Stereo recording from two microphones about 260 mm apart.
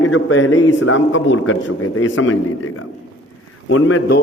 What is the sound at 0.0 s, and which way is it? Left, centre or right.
A man's voice, left.